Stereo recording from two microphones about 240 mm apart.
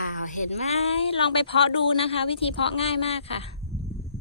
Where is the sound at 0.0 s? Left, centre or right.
Left.